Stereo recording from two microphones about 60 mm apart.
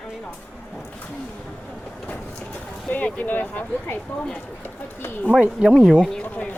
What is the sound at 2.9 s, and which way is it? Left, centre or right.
Speech, left.